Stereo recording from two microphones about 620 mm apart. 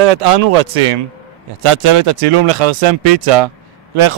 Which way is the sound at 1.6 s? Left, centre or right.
Right.